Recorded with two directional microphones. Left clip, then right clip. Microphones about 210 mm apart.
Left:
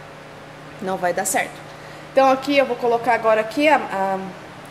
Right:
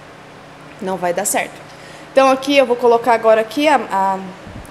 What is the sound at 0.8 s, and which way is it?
A woman's voice, 20° right (ahead or behind).